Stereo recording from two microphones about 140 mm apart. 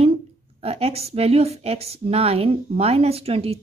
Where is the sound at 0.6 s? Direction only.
45° right (ahead or behind).